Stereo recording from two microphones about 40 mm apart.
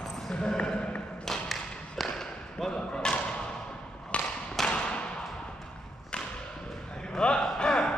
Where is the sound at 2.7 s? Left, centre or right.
Left.